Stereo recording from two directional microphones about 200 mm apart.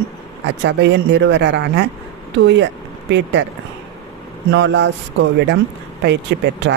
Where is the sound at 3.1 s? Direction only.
65° right (ahead or behind).